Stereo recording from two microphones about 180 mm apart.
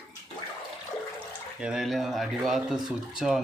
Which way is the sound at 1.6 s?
5° right (ahead or behind).